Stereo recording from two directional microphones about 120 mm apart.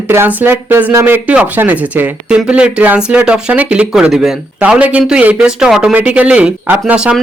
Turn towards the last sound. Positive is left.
turn(degrees=-10)  # may be behind; listen again after turning